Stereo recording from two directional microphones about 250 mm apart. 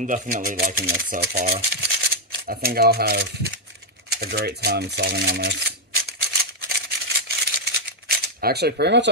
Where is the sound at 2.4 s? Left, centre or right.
Right.